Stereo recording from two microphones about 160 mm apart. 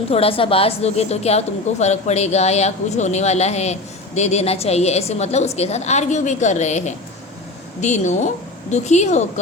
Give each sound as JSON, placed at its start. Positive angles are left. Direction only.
{"t": 0.1, "sound": "a woman's voice", "side_deg": 35}